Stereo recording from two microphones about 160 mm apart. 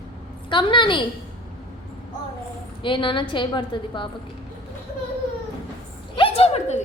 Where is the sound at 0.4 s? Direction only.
30° left (ahead or behind).